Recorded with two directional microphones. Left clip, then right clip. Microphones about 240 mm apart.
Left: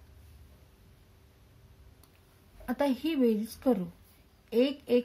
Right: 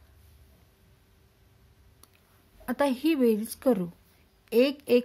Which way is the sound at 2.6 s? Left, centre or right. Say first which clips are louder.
Right 4 dB; right.